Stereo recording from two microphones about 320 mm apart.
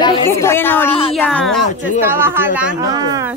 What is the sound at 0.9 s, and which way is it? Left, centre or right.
Speech, centre.